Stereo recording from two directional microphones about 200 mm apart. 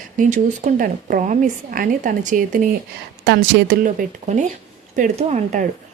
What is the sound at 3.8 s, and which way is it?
A woman's voice, 40° right (ahead or behind).